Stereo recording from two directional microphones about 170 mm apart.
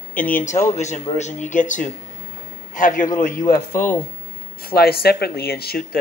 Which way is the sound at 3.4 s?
15° left (ahead or behind).